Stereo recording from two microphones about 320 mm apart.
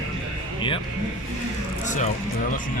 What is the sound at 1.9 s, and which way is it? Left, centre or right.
Speech, left.